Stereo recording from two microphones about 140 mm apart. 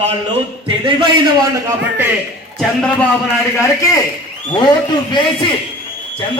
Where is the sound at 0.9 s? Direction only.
35° right (ahead or behind).